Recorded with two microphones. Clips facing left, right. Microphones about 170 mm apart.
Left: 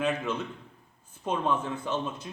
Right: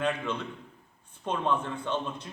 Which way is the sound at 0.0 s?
5° left (ahead or behind).